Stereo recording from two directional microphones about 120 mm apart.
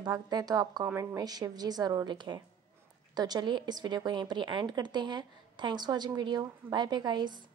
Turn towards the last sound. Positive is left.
turn(degrees=-40)  # may be behind; listen again after turning